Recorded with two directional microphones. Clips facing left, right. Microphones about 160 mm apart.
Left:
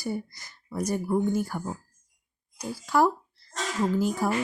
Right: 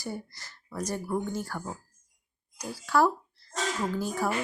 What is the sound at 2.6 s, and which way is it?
A woman's voice, 10° left (ahead or behind).